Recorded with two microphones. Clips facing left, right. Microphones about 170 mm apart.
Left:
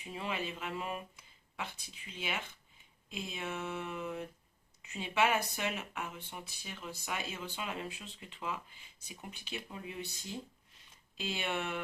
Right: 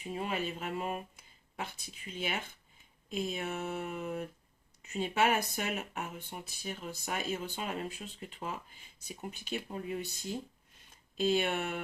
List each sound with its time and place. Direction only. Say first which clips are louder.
0.1 s speech: right 3 dB; 45° right (ahead or behind)
11.2 s speech: right 7 dB; 45° right (ahead or behind)